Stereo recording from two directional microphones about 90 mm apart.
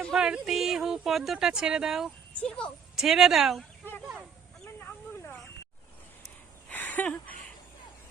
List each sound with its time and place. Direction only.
0.1 s speech: 10° right (ahead or behind)
2.4 s a woman's voice: 10° left (ahead or behind)
2.9 s speech: 5° right (ahead or behind)
4.9 s snake: 20° left (ahead or behind)
6.7 s a sound: 20° left (ahead or behind)